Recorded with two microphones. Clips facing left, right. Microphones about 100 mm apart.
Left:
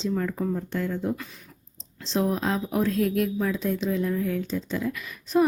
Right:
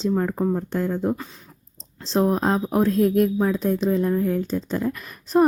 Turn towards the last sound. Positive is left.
turn(degrees=-45)  # may be behind; listen again after turning